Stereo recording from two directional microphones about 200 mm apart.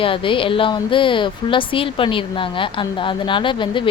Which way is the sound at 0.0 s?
25° left (ahead or behind).